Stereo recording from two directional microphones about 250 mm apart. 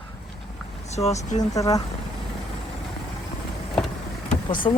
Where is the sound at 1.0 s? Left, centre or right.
Left.